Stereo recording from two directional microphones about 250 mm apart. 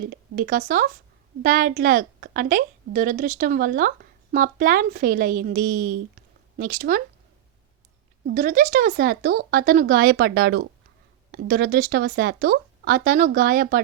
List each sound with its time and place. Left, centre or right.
0.1 s a woman's voice: right
8.4 s a woman's voice: right